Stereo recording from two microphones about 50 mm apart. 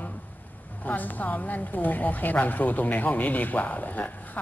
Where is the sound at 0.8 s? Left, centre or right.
Left.